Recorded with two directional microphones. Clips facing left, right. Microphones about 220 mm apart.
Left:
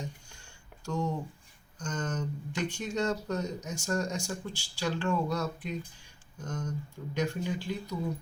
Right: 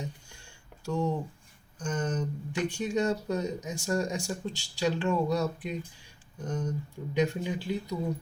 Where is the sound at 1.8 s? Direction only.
10° right (ahead or behind).